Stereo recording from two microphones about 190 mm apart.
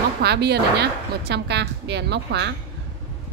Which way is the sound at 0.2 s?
60° right (ahead or behind).